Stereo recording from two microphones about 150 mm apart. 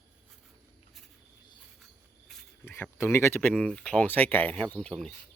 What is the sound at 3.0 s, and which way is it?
Speech, 15° left (ahead or behind).